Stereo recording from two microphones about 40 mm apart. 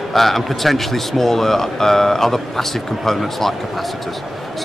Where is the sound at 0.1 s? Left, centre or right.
Centre.